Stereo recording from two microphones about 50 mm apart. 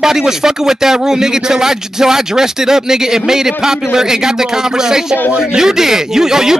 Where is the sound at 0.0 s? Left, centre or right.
Centre.